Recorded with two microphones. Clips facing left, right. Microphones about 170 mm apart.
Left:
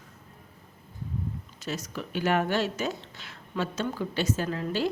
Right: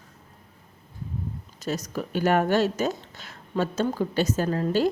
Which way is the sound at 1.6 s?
40° right (ahead or behind).